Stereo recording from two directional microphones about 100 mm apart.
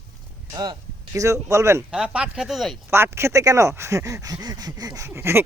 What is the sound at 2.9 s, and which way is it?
Speech, 25° right (ahead or behind).